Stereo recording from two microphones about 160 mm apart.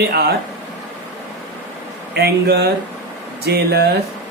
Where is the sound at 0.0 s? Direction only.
80° right.